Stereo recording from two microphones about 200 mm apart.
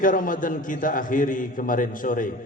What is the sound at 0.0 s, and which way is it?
A man's voice, 40° left (ahead or behind).